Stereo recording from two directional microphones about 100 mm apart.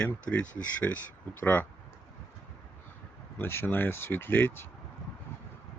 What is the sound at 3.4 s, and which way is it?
Speech, 25° left (ahead or behind).